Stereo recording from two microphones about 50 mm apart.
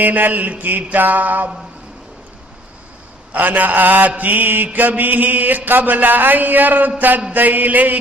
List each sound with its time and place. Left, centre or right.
0.0 s mantra: right
3.5 s mantra: right